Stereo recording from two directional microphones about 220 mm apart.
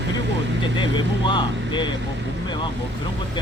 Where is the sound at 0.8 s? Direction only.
20° left (ahead or behind).